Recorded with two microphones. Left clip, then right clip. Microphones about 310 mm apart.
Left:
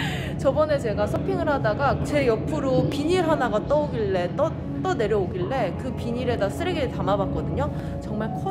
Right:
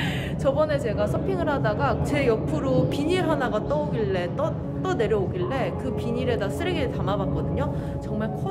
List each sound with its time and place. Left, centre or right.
0.5 s speech: centre